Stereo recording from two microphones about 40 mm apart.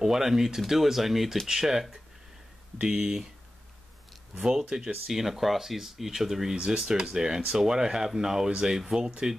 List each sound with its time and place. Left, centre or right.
0.0 s speech: centre
4.4 s speech: centre
6.5 s speech: right